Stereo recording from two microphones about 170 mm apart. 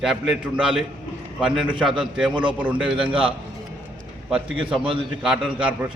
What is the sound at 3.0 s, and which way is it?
Speech, 30° right (ahead or behind).